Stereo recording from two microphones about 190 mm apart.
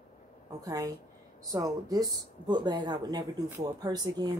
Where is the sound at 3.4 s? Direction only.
10° right (ahead or behind).